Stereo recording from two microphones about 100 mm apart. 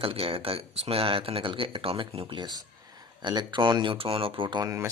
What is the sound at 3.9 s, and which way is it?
Speech, 65° right (ahead or behind).